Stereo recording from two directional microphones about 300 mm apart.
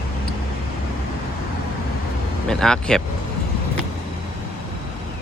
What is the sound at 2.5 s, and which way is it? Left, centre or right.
Speech, centre.